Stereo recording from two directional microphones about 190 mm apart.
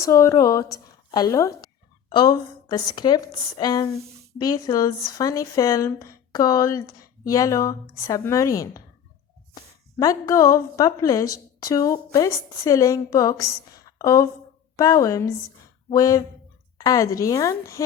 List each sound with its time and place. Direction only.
0.0 s speech: 15° left (ahead or behind)
10.0 s speech: 15° left (ahead or behind)